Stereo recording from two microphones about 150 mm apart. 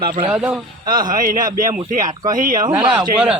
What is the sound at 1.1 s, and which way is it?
Speech, 65° right (ahead or behind).